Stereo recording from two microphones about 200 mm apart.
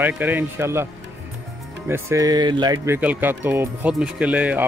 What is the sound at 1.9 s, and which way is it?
Speech, 15° right (ahead or behind).